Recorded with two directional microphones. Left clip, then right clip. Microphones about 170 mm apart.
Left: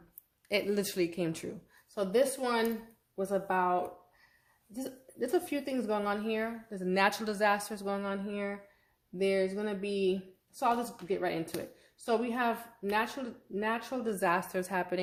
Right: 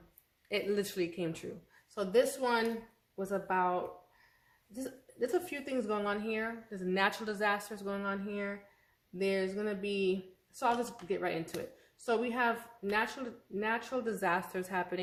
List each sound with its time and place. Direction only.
0.4 s a woman's voice: 35° left (ahead or behind)